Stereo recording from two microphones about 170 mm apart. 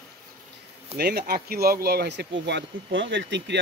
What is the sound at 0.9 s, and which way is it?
Speech, 70° right (ahead or behind).